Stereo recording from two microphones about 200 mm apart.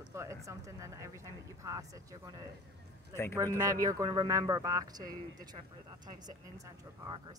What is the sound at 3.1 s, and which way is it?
Speech, 10° left (ahead or behind).